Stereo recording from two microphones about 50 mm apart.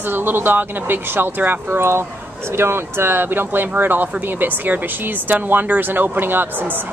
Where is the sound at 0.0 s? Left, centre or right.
Right.